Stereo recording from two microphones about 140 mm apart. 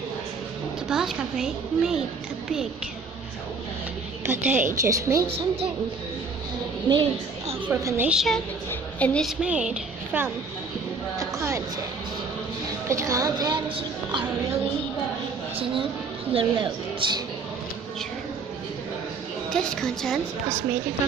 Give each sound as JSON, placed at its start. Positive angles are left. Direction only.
{"t": 0.8, "sound": "a woman's voice", "side_deg": -5}
{"t": 4.3, "sound": "a woman's voice", "side_deg": -15}
{"t": 6.9, "sound": "speech", "side_deg": -40}
{"t": 7.6, "sound": "a woman's voice", "side_deg": -15}
{"t": 9.0, "sound": "a woman's voice", "side_deg": 5}
{"t": 9.4, "sound": "a woman's voice", "side_deg": -5}
{"t": 11.1, "sound": "a sound", "side_deg": -20}
{"t": 12.8, "sound": "a woman's voice", "side_deg": -20}
{"t": 13.7, "sound": "speech", "side_deg": -40}
{"t": 15.5, "sound": "speech", "side_deg": -40}
{"t": 19.5, "sound": "a woman's voice", "side_deg": 5}